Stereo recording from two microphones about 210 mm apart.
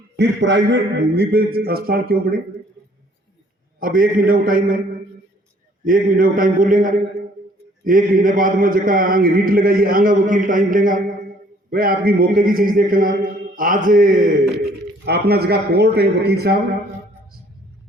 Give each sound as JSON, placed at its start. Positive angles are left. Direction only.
{"t": 0.2, "sound": "a man's voice", "side_deg": -60}
{"t": 3.8, "sound": "a man's voice", "side_deg": -40}
{"t": 5.8, "sound": "a man's voice", "side_deg": -40}